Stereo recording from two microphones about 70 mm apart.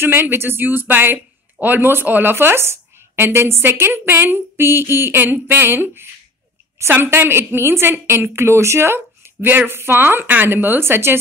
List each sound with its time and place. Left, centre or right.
0.0 s speech: right